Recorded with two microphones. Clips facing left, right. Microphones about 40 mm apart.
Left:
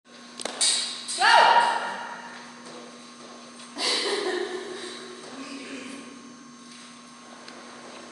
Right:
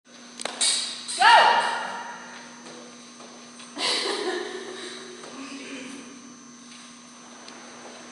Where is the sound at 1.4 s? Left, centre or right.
Centre.